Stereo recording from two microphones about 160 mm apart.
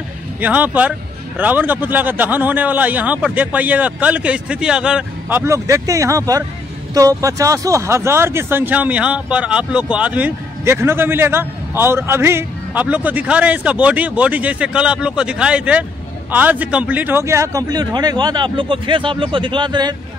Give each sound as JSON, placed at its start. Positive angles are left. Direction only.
{"t": 0.4, "sound": "speech", "side_deg": -10}
{"t": 5.4, "sound": "a man's voice", "side_deg": -20}